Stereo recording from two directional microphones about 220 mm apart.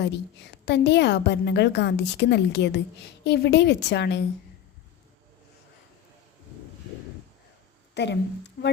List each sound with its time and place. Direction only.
0.0 s a woman's voice: 50° left (ahead or behind)
7.9 s a woman's voice: 50° left (ahead or behind)